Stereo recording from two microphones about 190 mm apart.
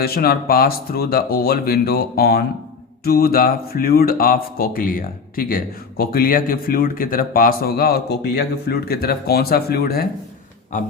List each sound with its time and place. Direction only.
0.0 s speech: 55° left (ahead or behind)